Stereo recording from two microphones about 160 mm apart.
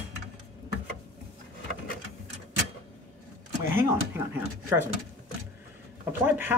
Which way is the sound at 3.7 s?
15° right (ahead or behind).